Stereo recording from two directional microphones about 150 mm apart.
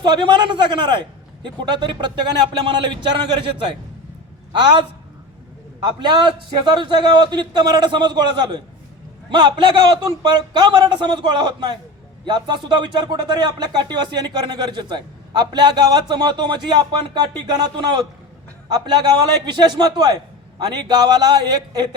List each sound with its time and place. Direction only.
0.0 s a man's voice: 30° right (ahead or behind)
5.8 s a man's voice: 30° right (ahead or behind)